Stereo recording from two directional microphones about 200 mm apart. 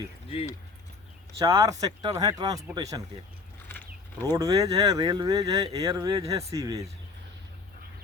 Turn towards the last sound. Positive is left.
turn(degrees=-15)  # may be behind; listen again after turning